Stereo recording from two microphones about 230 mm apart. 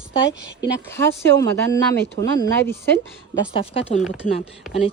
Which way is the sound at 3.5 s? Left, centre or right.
Left.